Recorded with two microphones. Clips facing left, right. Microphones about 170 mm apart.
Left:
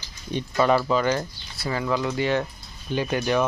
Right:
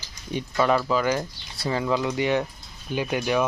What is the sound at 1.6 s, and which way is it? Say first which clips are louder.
Speech: right 1 dB; 20° right (ahead or behind).